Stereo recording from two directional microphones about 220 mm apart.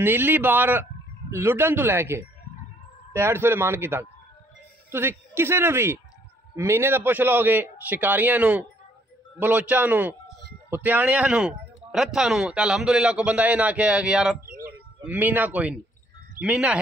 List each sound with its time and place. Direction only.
0.0 s a man's voice: 10° right (ahead or behind)
14.4 s bird: 40° right (ahead or behind)
15.0 s a man's voice: 10° right (ahead or behind)